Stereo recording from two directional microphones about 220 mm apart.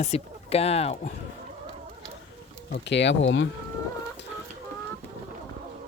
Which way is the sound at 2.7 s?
50° left (ahead or behind).